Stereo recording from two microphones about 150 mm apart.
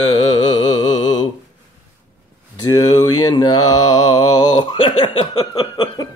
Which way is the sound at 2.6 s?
25° left (ahead or behind).